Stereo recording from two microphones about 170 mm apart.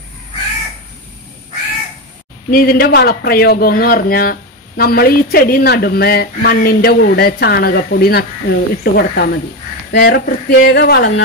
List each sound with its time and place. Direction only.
2.5 s speech: 60° left (ahead or behind)